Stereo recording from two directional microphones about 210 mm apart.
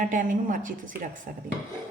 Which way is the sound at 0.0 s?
40° right (ahead or behind).